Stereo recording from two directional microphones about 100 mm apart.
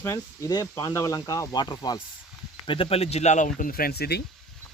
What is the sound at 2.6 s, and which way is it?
Speech, 60° left (ahead or behind).